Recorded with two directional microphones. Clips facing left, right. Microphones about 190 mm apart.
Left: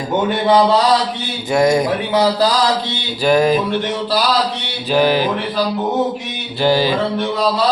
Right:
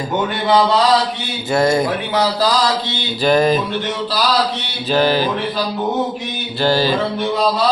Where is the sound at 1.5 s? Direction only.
15° left (ahead or behind).